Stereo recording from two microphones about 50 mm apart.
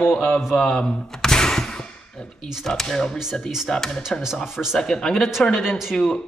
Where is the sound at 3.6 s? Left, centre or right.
Centre.